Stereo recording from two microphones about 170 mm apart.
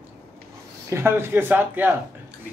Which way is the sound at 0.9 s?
15° right (ahead or behind).